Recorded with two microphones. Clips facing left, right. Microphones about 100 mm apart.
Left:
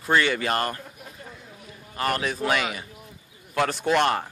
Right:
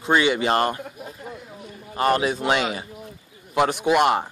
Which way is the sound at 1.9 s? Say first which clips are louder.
Right 6 dB; 25° right (ahead or behind).